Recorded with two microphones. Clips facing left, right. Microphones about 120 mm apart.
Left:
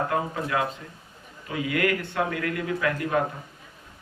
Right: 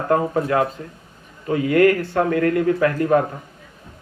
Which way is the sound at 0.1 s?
45° right (ahead or behind).